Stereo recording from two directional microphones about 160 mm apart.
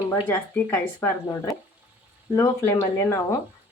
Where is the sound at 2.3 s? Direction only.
15° left (ahead or behind).